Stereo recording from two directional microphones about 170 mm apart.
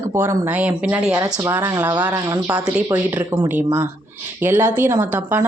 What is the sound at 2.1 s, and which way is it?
Speech, 20° right (ahead or behind).